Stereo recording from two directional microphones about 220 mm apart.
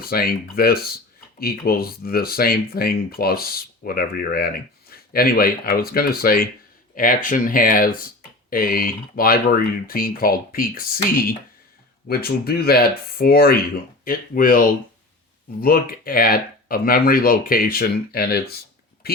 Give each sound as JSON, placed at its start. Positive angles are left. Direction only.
{"t": 0.0, "sound": "speech", "side_deg": 45}